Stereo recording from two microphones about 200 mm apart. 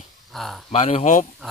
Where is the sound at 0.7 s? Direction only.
35° left (ahead or behind).